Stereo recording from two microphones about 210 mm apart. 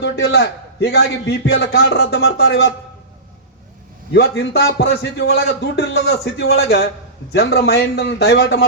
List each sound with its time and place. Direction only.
0.0 s a man's voice: 55° left (ahead or behind)
4.1 s a man's voice: 50° left (ahead or behind)